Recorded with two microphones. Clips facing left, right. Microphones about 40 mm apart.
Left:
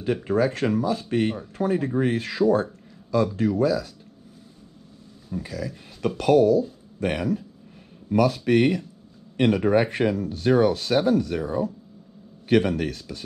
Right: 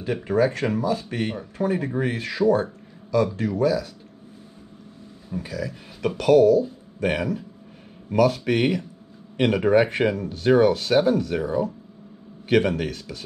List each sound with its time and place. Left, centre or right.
0.1 s speech: right
5.3 s speech: right
8.3 s speech: right